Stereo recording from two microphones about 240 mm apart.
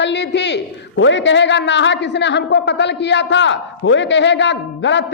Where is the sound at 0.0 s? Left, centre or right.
Left.